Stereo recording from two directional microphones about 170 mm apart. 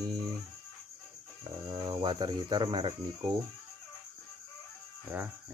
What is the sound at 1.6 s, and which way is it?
Cricket, 25° right (ahead or behind).